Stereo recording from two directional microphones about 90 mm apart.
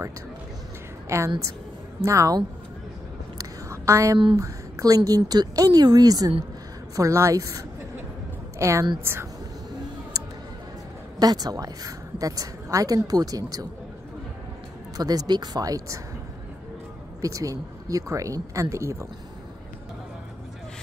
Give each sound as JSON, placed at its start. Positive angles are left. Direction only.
{"t": 1.0, "sound": "a woman's voice", "side_deg": -30}
{"t": 3.3, "sound": "a sound", "side_deg": -35}
{"t": 4.4, "sound": "a woman's voice", "side_deg": -40}
{"t": 7.0, "sound": "a woman's voice", "side_deg": -35}
{"t": 10.1, "sound": "a sound", "side_deg": -40}
{"t": 11.1, "sound": "a woman's voice", "side_deg": -45}
{"t": 15.0, "sound": "a woman's voice", "side_deg": -45}
{"t": 17.2, "sound": "speech", "side_deg": -40}